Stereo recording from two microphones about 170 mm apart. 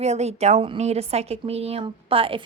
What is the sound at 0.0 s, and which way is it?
A woman's voice, 40° right (ahead or behind).